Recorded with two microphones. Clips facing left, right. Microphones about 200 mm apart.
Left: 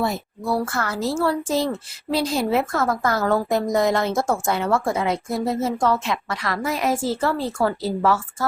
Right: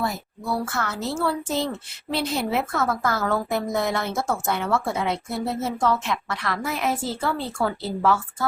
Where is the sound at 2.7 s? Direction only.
15° left (ahead or behind).